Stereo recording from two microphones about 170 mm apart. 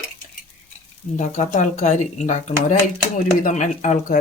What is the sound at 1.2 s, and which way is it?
Speech, 45° left (ahead or behind).